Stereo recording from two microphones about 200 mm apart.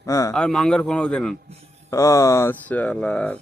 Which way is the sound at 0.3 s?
5° left (ahead or behind).